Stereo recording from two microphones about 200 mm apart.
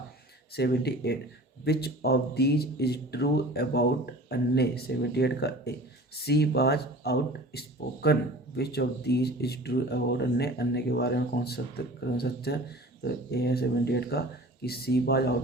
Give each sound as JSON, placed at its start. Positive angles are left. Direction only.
{"t": 0.5, "sound": "speech", "side_deg": 55}